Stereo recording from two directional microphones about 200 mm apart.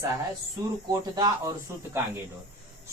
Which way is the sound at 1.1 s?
20° right (ahead or behind).